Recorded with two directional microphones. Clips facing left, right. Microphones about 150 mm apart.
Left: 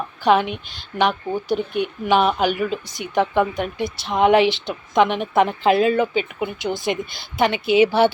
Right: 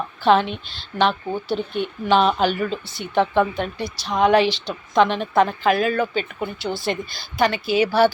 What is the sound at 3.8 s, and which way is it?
A woman's voice, 20° left (ahead or behind).